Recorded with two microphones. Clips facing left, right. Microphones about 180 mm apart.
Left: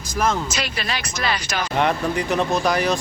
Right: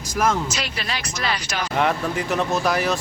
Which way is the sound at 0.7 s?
60° left (ahead or behind).